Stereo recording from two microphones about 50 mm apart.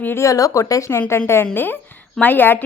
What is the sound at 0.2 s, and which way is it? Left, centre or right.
Speech, left.